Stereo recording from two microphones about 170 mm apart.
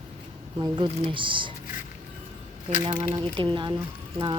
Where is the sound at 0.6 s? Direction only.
30° right (ahead or behind).